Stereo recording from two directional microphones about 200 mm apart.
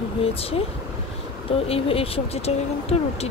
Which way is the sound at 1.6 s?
30° left (ahead or behind).